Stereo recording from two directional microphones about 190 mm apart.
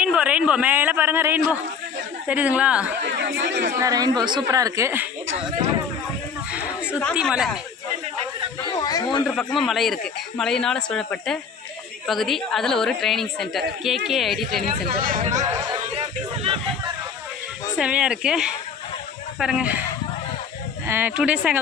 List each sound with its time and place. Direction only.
0.0 s speech: 5° right (ahead or behind)
3.0 s chatter: 65° right (ahead or behind)
3.8 s speech: 20° right (ahead or behind)
6.5 s a sound: 10° right (ahead or behind)
7.1 s a woman's voice: centre (ahead or behind)
8.8 s speech: 20° left (ahead or behind)
9.2 s a woman's voice: 5° left (ahead or behind)
14.7 s speech: 45° right (ahead or behind)
15.4 s a sound: 20° right (ahead or behind)
16.0 s a sound: 30° right (ahead or behind)
17.7 s a woman's voice: 5° right (ahead or behind)
20.8 s speech: 10° right (ahead or behind)